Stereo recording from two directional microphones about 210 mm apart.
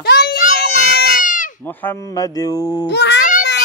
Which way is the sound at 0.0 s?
50° left (ahead or behind).